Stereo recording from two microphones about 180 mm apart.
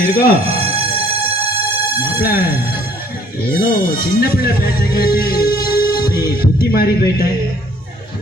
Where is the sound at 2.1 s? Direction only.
55° left (ahead or behind).